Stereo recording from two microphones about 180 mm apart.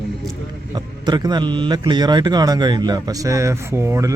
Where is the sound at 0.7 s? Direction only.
20° right (ahead or behind).